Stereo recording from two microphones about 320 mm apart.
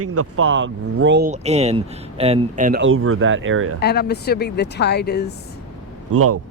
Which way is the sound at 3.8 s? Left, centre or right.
Left.